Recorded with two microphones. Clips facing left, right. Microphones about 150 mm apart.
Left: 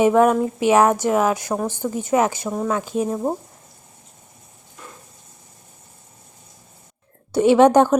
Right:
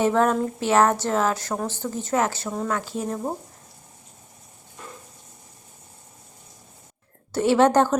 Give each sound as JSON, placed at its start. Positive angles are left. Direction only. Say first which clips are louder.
{"t": 0.0, "sound": "a woman's voice", "louder": "left 5 dB", "side_deg": 15}
{"t": 7.3, "sound": "a woman's voice", "louder": "left 5 dB", "side_deg": 15}